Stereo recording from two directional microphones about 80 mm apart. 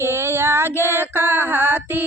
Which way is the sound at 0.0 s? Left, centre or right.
Right.